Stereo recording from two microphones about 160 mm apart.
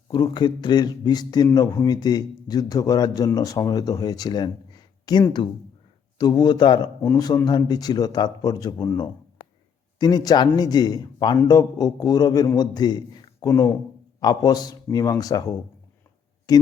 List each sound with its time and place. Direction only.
0.1 s a man's voice: 25° left (ahead or behind)